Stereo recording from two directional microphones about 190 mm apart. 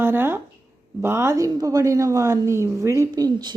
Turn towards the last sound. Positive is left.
turn(degrees=-20)  # may be behind; listen again after turning